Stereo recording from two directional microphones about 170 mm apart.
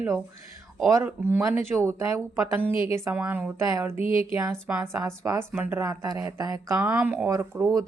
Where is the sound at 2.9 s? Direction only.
10° right (ahead or behind).